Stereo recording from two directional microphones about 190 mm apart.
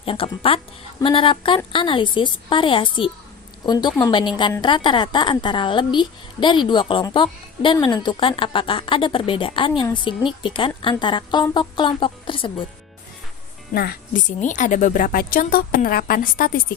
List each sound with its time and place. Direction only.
0.0 s a woman's voice: 30° left (ahead or behind)
13.7 s a woman's voice: 50° left (ahead or behind)